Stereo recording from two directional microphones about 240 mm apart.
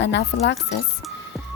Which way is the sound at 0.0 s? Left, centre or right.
Left.